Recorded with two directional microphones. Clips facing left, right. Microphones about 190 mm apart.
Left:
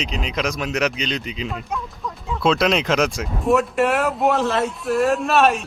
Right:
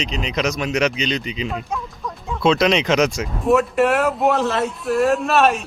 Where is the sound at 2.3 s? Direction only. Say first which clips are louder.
Right 2 dB; centre (ahead or behind).